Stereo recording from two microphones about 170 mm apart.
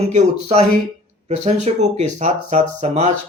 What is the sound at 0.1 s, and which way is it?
Speech, 40° right (ahead or behind).